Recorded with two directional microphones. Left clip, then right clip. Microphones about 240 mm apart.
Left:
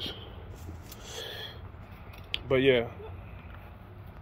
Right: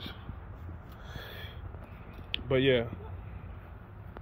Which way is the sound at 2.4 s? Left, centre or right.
Centre.